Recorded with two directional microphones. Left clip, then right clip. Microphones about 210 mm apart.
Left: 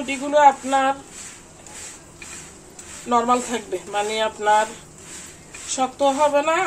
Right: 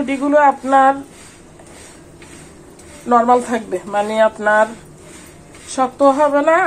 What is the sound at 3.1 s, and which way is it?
Speech, 15° right (ahead or behind).